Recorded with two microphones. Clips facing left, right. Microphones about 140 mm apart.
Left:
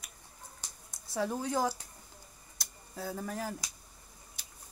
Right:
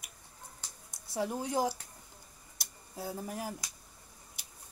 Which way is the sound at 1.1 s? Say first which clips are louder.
Even; 20° right (ahead or behind).